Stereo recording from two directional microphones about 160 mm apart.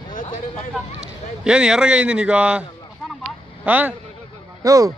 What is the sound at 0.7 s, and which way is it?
Speech, 5° right (ahead or behind).